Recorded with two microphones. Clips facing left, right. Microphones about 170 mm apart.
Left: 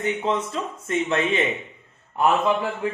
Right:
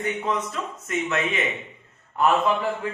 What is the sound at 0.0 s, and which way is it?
Speech, 25° left (ahead or behind).